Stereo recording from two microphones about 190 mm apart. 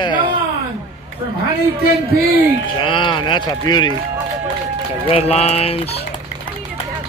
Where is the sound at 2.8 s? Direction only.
25° left (ahead or behind).